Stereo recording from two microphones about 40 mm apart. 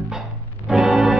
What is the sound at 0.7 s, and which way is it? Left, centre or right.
Music, centre.